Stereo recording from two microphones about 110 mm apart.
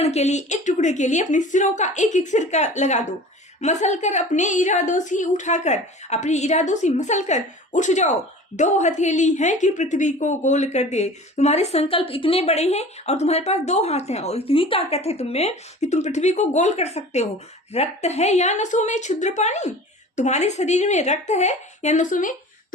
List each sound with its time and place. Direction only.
0.0 s a woman's voice: 80° left